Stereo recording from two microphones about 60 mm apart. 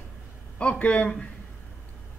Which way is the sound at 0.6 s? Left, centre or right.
Left.